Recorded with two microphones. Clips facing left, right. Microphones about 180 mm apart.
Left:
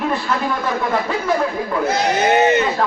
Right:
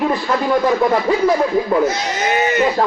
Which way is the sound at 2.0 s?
60° left (ahead or behind).